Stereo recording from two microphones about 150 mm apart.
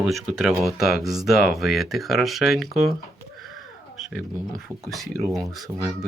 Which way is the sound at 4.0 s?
Centre (ahead or behind).